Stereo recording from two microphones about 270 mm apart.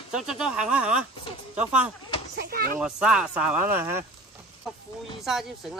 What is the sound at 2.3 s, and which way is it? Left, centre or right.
Speech, right.